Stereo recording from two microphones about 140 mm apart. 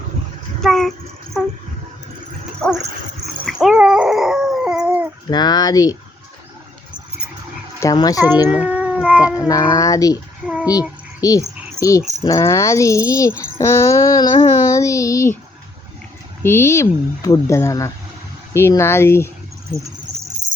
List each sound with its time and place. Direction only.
0.6 s a sound: 5° left (ahead or behind)
2.6 s dog: centre (ahead or behind)
5.3 s speech: 30° left (ahead or behind)
7.8 s speech: 25° left (ahead or behind)
8.4 s cat: 10° right (ahead or behind)
9.2 s speech: 25° left (ahead or behind)
10.4 s a sound: 5° right (ahead or behind)
11.2 s speech: 25° left (ahead or behind)
16.4 s speech: 20° left (ahead or behind)